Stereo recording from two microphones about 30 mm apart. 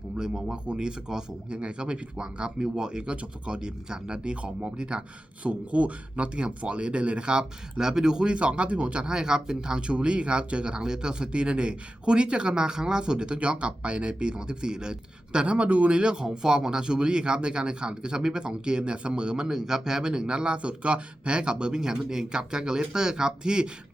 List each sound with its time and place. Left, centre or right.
0.2 s speech: centre
0.5 s speech: right
3.1 s speech: right
5.4 s speech: right
9.0 s speech: right
9.8 s speech: right
19.5 s speech: centre